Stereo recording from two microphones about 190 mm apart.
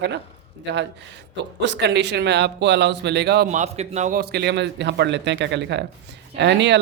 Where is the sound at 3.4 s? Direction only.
35° right (ahead or behind); by 6.8 s 65° right (ahead or behind).